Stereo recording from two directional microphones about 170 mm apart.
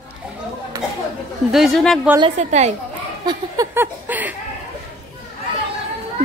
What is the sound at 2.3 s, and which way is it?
Speech, 40° right (ahead or behind).